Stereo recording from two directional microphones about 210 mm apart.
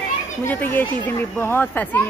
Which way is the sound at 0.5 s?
10° left (ahead or behind).